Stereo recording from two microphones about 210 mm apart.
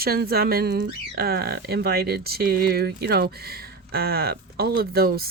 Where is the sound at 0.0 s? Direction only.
45° right (ahead or behind).